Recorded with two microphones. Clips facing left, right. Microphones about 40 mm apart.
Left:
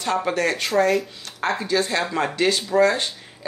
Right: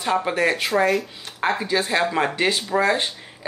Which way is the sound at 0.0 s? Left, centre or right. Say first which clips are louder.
Right 1 dB; centre.